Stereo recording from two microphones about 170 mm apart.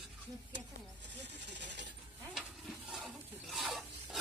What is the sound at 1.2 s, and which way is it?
Vehicle, 90° right.